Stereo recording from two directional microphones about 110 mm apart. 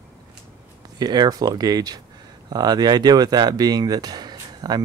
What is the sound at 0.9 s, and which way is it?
Speech, 40° right (ahead or behind).